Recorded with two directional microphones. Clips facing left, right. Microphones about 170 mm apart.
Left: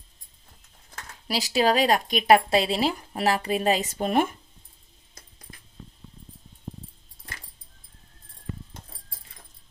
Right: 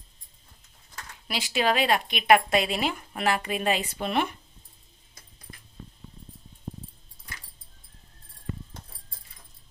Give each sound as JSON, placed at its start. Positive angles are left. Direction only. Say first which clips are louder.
{"t": 1.3, "sound": "speech", "louder": "left 3 dB", "side_deg": 40}